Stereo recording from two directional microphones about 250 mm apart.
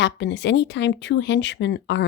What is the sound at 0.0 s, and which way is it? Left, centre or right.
A woman's voice, left.